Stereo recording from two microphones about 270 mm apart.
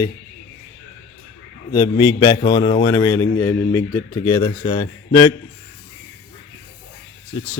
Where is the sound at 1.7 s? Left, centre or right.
Centre.